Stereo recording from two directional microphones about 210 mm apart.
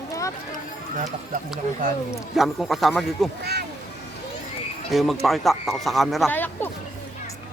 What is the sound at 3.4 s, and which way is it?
Speech, 50° right (ahead or behind).